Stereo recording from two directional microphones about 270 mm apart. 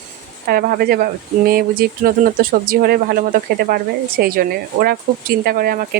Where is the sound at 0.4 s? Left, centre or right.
Right.